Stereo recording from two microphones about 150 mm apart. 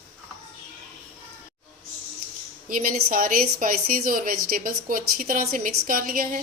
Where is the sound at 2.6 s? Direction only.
65° right (ahead or behind).